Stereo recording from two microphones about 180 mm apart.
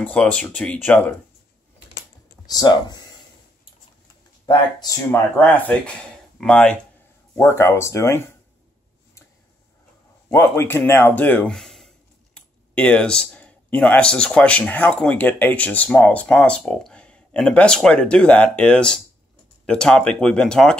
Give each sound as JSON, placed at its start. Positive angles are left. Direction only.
{"t": 0.0, "sound": "speech", "side_deg": 5}
{"t": 2.4, "sound": "speech", "side_deg": 20}
{"t": 4.5, "sound": "speech", "side_deg": 25}
{"t": 5.4, "sound": "speech", "side_deg": 10}
{"t": 10.3, "sound": "speech", "side_deg": 15}